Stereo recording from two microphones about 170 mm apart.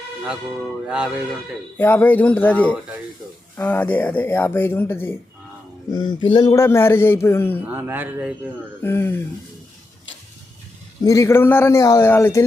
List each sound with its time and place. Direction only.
0.9 s speech: 5° right (ahead or behind)
1.8 s speech: 10° left (ahead or behind)
5.9 s speech: 25° left (ahead or behind)
7.6 s speech: 10° right (ahead or behind)
8.8 s speech: 15° left (ahead or behind)
11.0 s speech: 20° left (ahead or behind)